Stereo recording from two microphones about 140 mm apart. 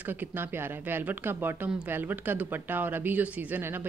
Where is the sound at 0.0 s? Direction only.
15° right (ahead or behind).